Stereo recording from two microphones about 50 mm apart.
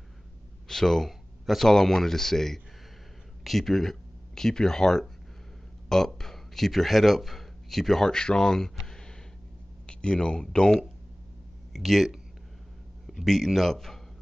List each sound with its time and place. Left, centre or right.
0.7 s speech: centre
8.8 s a sound: centre
9.8 s speech: centre
11.7 s a man's voice: centre